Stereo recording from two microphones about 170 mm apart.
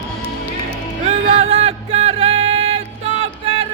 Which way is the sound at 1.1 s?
35° right (ahead or behind).